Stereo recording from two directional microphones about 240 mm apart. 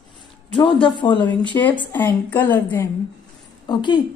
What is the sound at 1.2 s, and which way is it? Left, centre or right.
A woman's voice, centre.